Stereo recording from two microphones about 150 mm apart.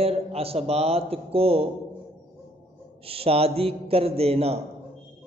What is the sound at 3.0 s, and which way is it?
Mantra, 40° right (ahead or behind).